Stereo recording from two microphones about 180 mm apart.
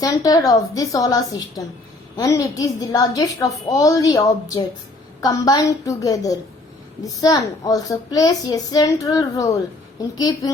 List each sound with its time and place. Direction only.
0.0 s a child's voice: 20° left (ahead or behind)
5.2 s a child's voice: 20° left (ahead or behind)